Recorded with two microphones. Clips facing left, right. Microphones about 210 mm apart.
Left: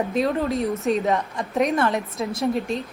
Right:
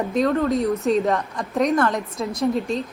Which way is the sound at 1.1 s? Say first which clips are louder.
Even; 15° left (ahead or behind).